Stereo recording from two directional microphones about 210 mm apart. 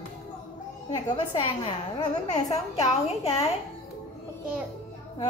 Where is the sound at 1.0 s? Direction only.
20° left (ahead or behind).